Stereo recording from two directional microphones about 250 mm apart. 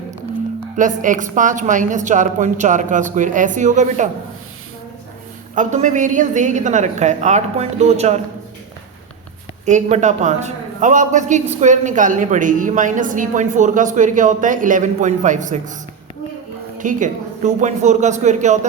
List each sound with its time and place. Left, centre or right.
0.8 s a man's voice: right
5.5 s a woman's voice: right
9.6 s a man's voice: right
16.7 s a woman's voice: right